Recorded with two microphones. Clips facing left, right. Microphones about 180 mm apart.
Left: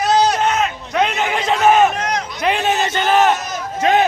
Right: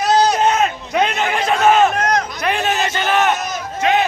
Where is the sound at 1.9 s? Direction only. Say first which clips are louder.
Right 4 dB; 45° right (ahead or behind).